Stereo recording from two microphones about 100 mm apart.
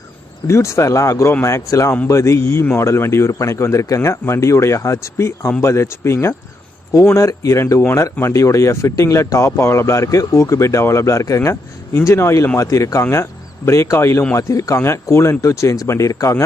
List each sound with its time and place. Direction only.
0.4 s speech: 30° left (ahead or behind)